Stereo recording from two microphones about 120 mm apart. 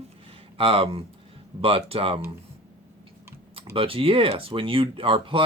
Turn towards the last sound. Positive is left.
turn(degrees=-50)  # may be behind; listen again after turning